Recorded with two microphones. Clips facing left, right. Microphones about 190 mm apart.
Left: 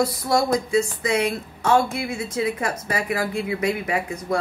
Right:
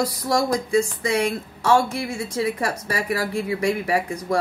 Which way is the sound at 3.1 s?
35° right (ahead or behind).